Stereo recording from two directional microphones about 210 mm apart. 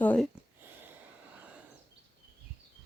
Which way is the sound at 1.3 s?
5° right (ahead or behind).